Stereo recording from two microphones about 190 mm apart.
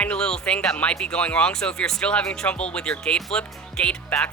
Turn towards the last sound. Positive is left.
turn(degrees=5)  # may be behind; listen again after turning